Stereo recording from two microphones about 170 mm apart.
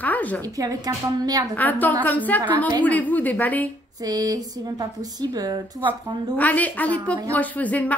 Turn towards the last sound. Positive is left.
turn(degrees=10)  # may be behind; listen again after turning